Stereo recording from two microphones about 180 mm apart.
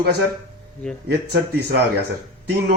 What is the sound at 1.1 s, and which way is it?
Speech, 60° right (ahead or behind).